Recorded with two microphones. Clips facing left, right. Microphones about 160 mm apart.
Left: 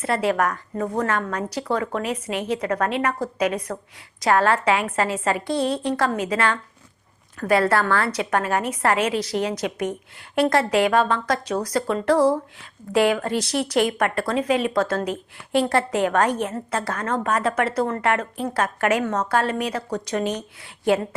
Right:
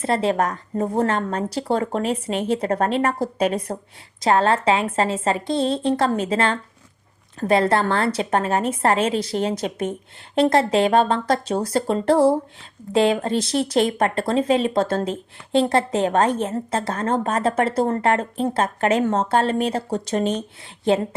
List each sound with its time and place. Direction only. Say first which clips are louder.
0.0 s speech: right 1 dB; 25° right (ahead or behind)